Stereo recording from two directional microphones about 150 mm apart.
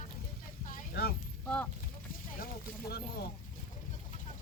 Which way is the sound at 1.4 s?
5° left (ahead or behind).